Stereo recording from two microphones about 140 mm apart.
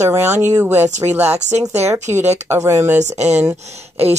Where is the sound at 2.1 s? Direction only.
15° right (ahead or behind).